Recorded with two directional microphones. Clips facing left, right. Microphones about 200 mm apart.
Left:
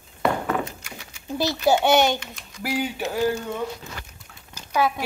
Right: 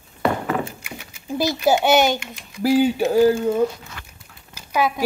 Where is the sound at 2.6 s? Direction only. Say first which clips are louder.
Right 10 dB; 30° right (ahead or behind).